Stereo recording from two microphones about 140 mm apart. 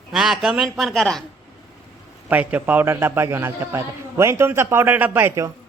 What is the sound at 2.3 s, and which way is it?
A man's voice, 10° right (ahead or behind).